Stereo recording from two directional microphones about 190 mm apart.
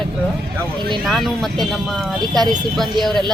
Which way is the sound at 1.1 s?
Centre (ahead or behind).